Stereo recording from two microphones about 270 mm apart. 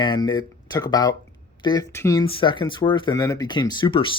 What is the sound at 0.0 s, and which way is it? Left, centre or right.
Speech, centre.